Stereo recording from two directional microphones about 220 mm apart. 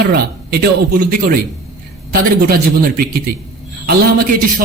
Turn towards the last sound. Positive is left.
turn(degrees=-45)  # may be behind; listen again after turning